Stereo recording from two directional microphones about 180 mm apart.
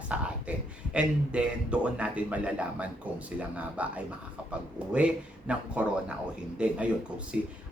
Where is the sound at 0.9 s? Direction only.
5° right (ahead or behind).